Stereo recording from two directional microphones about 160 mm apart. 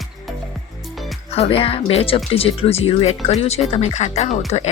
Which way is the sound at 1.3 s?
40° left (ahead or behind).